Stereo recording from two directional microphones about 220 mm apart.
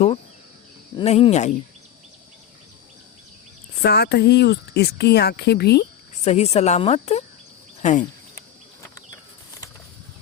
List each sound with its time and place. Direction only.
0.9 s speech: 25° left (ahead or behind)
3.8 s speech: 45° left (ahead or behind)
6.2 s speech: 30° left (ahead or behind)